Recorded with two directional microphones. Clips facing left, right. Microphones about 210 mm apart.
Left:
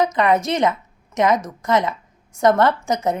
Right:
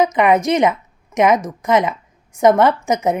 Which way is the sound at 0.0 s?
20° right (ahead or behind).